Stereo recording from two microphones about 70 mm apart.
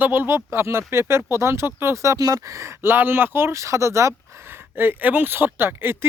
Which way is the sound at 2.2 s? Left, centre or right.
Right.